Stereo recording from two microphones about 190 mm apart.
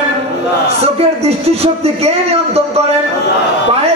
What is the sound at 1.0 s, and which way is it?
A man's voice, 35° right (ahead or behind).